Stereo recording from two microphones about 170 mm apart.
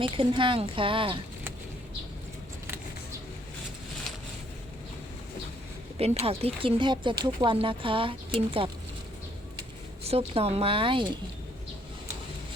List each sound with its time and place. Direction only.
0.0 s speech: 30° right (ahead or behind)
6.0 s speech: 35° right (ahead or behind)